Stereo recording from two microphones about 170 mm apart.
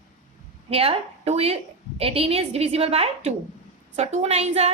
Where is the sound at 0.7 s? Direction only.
35° right (ahead or behind).